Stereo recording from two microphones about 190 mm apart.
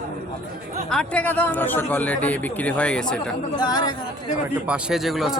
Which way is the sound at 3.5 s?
20° left (ahead or behind).